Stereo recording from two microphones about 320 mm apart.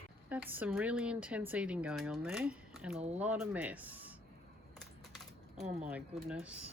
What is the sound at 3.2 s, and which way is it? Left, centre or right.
Speech, centre.